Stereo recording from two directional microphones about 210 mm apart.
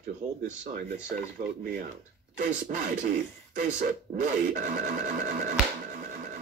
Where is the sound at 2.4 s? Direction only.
35° right (ahead or behind).